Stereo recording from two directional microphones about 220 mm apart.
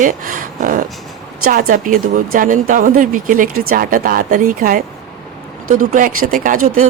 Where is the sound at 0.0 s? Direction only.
40° right (ahead or behind).